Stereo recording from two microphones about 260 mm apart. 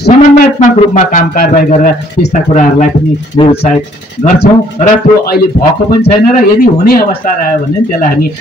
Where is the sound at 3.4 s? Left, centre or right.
Left.